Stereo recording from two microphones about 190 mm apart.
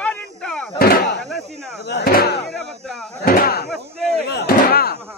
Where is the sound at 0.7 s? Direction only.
50° left (ahead or behind).